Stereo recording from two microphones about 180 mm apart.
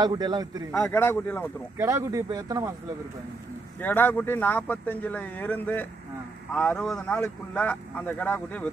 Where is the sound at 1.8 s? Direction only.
15° right (ahead or behind).